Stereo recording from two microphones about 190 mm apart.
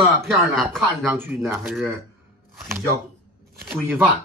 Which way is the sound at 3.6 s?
10° right (ahead or behind).